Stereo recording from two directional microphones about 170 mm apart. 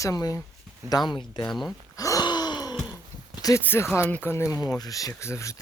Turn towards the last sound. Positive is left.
turn(degrees=15)  # may be behind; listen again after turning